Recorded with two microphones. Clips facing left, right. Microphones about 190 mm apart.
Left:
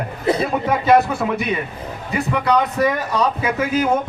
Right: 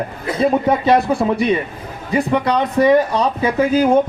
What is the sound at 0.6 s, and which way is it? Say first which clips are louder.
Speech: right 1 dB; 30° right (ahead or behind).